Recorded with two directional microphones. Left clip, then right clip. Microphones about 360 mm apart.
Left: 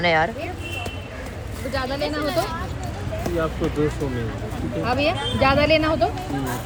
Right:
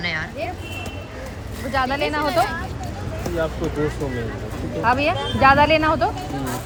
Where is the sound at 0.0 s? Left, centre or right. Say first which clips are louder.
Left 7 dB; centre.